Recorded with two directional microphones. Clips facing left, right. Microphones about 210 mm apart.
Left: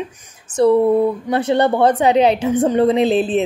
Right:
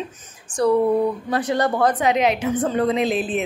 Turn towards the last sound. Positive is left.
turn(degrees=30)  # may be behind; listen again after turning